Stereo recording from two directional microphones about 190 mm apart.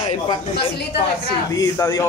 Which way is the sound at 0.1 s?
30° left (ahead or behind).